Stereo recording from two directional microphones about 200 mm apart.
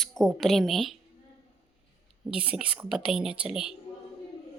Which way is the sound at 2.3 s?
5° right (ahead or behind).